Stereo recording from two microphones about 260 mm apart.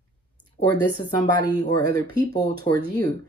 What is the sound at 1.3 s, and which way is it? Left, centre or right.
Speech, centre.